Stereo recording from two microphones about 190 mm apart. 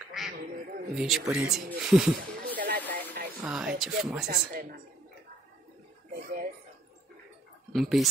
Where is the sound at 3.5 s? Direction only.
5° right (ahead or behind).